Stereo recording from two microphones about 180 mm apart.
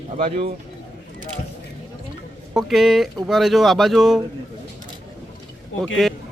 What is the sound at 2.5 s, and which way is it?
Speech, centre (ahead or behind).